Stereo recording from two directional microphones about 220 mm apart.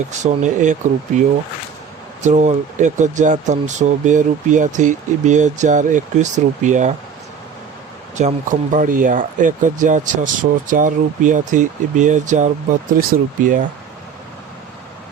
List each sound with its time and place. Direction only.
0.0 s speech: 30° right (ahead or behind)
2.2 s speech: 30° right (ahead or behind)
8.1 s speech: 35° right (ahead or behind)